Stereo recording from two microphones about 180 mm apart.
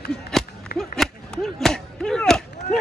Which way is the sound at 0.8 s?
Centre (ahead or behind).